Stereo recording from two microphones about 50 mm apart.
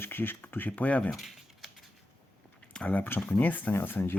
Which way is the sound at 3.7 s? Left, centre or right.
Left.